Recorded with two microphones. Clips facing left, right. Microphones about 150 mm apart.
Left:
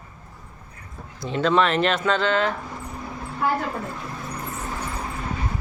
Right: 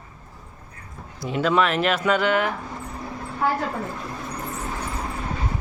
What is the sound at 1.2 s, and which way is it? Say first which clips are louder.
A woman's voice: left 1 dB; 10° right (ahead or behind).